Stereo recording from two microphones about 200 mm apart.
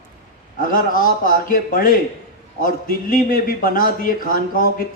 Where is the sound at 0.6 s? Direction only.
45° left (ahead or behind).